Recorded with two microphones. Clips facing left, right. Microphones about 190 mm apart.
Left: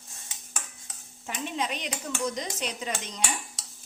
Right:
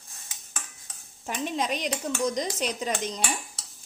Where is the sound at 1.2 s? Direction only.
40° right (ahead or behind).